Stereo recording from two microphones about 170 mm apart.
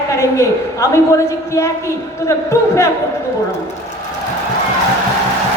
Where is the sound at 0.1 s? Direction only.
20° left (ahead or behind).